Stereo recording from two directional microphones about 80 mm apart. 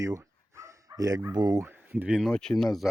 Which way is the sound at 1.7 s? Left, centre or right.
Right.